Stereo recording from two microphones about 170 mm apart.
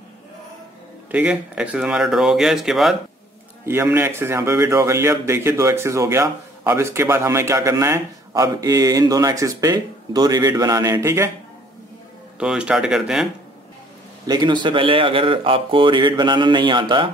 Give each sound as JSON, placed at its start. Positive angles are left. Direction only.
{"t": 1.1, "sound": "speech", "side_deg": -10}
{"t": 3.6, "sound": "a man's voice", "side_deg": -15}
{"t": 12.4, "sound": "speech", "side_deg": -5}
{"t": 14.2, "sound": "a man's voice", "side_deg": -25}